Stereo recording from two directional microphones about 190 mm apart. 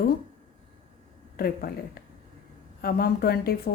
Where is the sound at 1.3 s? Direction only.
50° left (ahead or behind).